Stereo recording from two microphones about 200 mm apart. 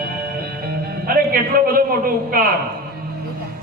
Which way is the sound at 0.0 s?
50° right (ahead or behind).